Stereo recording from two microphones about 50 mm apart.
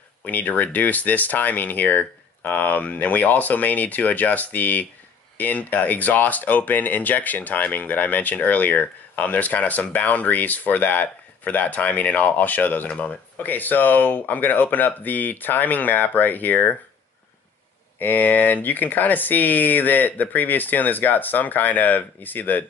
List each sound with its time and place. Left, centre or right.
0.2 s speech: left
17.9 s speech: left